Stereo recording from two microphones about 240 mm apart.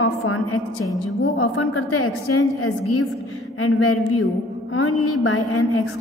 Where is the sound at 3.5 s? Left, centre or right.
Left.